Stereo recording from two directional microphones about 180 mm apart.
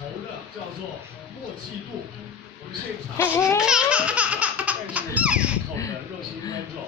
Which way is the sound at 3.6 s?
5° right (ahead or behind).